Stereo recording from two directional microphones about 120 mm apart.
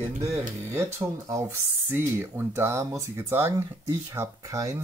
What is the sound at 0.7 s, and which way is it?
Speech, 20° right (ahead or behind).